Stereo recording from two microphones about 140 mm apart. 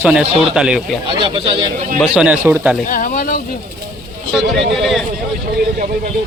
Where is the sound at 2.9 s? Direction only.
70° left (ahead or behind).